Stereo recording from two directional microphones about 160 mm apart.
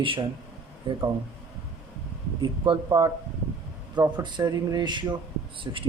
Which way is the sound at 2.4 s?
25° right (ahead or behind).